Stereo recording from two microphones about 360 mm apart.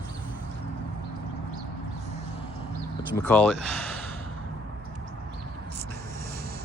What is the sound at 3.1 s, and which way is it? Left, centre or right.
Speech, centre.